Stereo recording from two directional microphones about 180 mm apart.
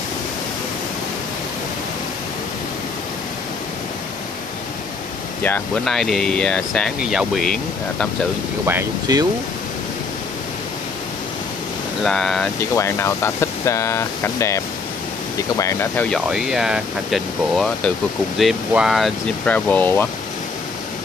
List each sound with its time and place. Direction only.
5.4 s speech: 5° left (ahead or behind)
8.6 s speech: 15° right (ahead or behind)
12.0 s speech: centre (ahead or behind)
12.7 s speech: 15° left (ahead or behind)
16.3 s speech: 5° right (ahead or behind)